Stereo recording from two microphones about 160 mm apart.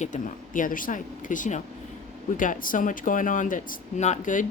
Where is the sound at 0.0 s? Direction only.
50° left (ahead or behind).